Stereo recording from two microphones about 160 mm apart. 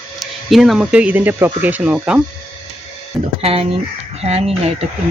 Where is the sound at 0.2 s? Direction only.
Centre (ahead or behind).